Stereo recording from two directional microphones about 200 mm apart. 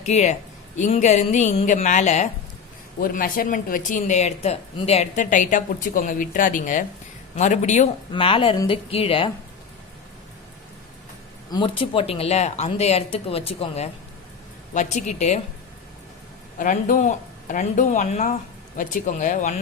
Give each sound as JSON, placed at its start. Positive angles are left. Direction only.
{"t": 0.0, "sound": "speech", "side_deg": 35}
{"t": 8.1, "sound": "speech", "side_deg": 25}
{"t": 11.5, "sound": "speech", "side_deg": 25}
{"t": 16.6, "sound": "speech", "side_deg": 40}